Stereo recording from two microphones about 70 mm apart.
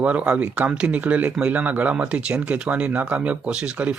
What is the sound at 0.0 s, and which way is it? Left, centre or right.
Speech, right.